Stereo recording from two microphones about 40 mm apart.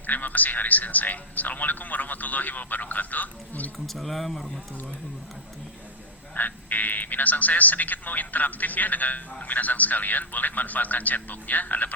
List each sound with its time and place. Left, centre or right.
0.1 s a man's voice: left
3.8 s speech: centre
6.3 s a man's voice: left